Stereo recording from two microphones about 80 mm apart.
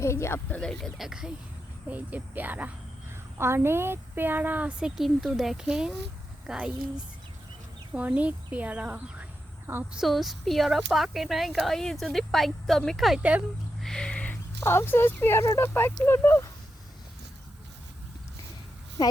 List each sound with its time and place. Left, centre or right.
0.0 s speech: left
0.3 s speech: left
0.6 s speech: centre
0.9 s speech: centre
1.9 s a woman's voice: centre
4.9 s speech: centre
9.9 s speech: centre
13.1 s speech: centre
13.8 s a sound: centre
14.6 s speech: left
19.0 s speech: left